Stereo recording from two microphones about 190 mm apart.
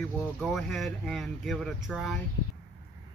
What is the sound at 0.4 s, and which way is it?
Speech, centre (ahead or behind).